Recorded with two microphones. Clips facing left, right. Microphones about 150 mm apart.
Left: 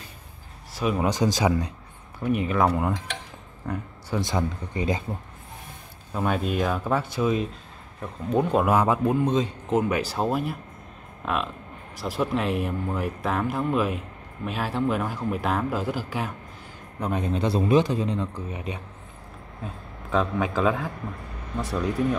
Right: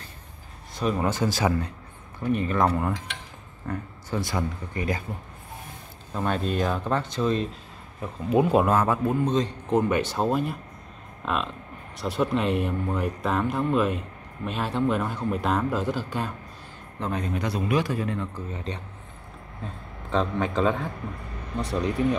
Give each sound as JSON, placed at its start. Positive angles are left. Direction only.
{"t": 0.7, "sound": "a man's voice", "side_deg": 10}
{"t": 6.1, "sound": "a man's voice", "side_deg": 5}
{"t": 8.0, "sound": "speech", "side_deg": -5}
{"t": 8.6, "sound": "a man's voice", "side_deg": 15}
{"t": 17.0, "sound": "a man's voice", "side_deg": 20}